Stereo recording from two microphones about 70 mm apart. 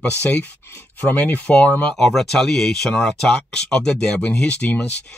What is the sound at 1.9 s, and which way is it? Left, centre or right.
Speech, centre.